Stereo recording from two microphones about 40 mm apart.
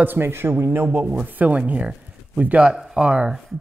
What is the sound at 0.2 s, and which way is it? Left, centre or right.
Speech, right.